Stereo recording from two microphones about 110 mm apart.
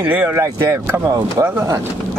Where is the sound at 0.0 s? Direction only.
20° right (ahead or behind).